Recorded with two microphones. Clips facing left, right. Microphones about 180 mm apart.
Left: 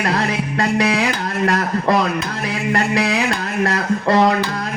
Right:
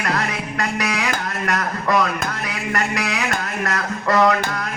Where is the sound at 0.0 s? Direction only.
30° left (ahead or behind).